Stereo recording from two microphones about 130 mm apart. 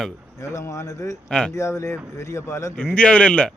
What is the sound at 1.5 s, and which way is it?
Speech, 20° left (ahead or behind).